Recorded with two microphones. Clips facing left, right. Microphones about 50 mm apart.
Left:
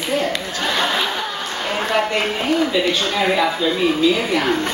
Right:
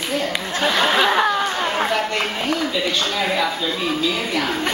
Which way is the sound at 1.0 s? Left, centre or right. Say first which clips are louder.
Right 6 dB; right.